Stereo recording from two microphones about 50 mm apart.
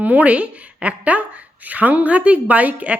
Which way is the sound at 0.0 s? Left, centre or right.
Right.